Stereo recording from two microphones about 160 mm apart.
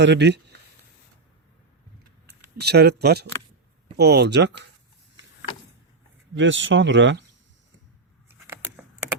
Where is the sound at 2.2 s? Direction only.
90° right.